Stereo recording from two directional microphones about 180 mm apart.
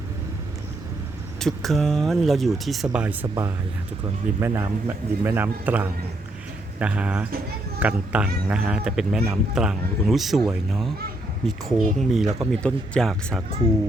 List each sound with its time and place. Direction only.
1.4 s a man's voice: centre (ahead or behind)